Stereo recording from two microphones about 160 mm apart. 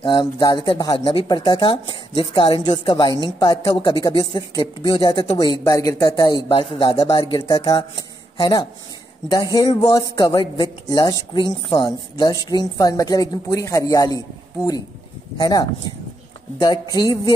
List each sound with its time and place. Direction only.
0.0 s speech: 30° left (ahead or behind)